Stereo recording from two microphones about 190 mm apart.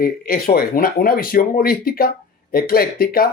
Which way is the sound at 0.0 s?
50° left (ahead or behind).